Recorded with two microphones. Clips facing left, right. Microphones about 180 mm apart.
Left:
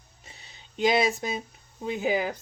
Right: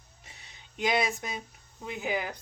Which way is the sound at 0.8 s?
30° left (ahead or behind).